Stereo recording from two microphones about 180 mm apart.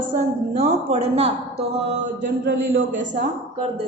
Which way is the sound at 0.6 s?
35° right (ahead or behind).